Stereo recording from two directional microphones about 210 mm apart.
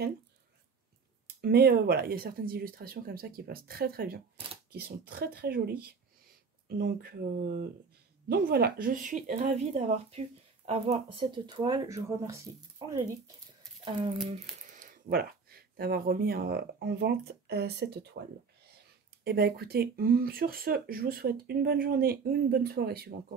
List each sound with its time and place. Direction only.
1.4 s speech: 45° right (ahead or behind); by 13.0 s 15° right (ahead or behind)
14.7 s speech: 35° right (ahead or behind)
19.2 s speech: 50° right (ahead or behind)